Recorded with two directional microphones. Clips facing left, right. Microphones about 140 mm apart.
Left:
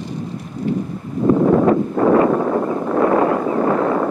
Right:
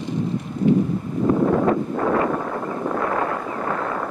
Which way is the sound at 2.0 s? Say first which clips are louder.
Left 7 dB; 35° left (ahead or behind).